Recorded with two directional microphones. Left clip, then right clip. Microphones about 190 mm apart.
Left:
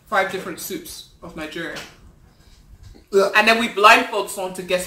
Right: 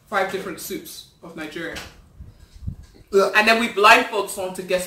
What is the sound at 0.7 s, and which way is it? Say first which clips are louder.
Speech: left 1 dB; 15° left (ahead or behind).